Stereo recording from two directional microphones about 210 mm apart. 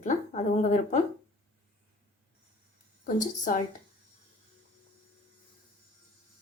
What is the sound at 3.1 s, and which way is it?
Speech, 40° left (ahead or behind).